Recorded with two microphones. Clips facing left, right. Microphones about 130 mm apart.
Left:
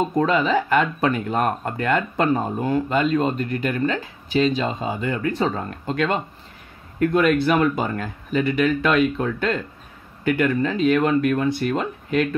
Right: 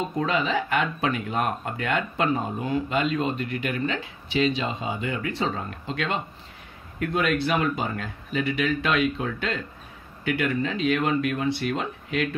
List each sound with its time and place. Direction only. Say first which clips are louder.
0.2 s speech: left 5 dB; 45° left (ahead or behind)